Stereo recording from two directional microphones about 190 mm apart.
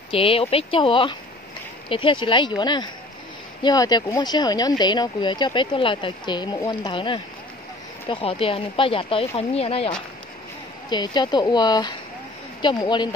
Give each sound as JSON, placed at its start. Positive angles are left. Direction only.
{"t": 0.1, "sound": "speech", "side_deg": 30}